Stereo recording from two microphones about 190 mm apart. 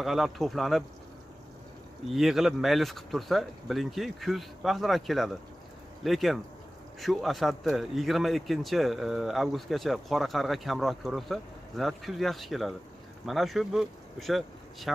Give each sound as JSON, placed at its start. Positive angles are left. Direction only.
{"t": 0.0, "sound": "speech", "side_deg": 0}
{"t": 2.0, "sound": "speech", "side_deg": 0}